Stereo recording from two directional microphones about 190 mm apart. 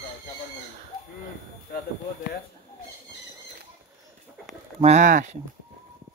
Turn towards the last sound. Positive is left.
turn(degrees=-40)  # may be behind; listen again after turning